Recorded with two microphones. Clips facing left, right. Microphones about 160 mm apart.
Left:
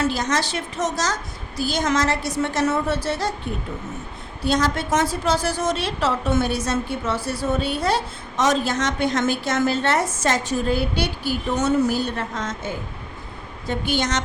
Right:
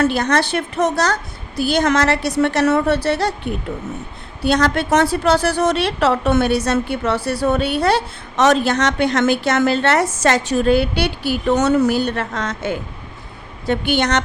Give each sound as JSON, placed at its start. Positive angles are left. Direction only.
{"t": 0.0, "sound": "a woman's voice", "side_deg": -60}